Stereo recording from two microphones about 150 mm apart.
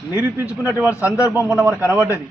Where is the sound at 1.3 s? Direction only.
10° right (ahead or behind).